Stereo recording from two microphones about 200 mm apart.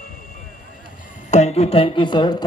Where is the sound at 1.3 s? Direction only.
35° left (ahead or behind).